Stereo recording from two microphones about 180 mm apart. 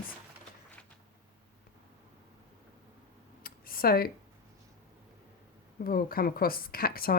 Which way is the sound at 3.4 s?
55° left (ahead or behind).